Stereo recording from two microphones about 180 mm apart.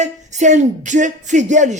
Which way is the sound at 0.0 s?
40° right (ahead or behind).